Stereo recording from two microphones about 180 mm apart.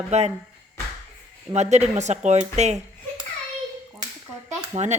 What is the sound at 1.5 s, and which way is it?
Speech, 40° right (ahead or behind).